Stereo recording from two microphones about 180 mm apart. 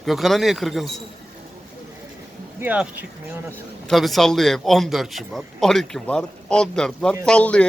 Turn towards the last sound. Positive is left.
turn(degrees=5)  # may be behind; listen again after turning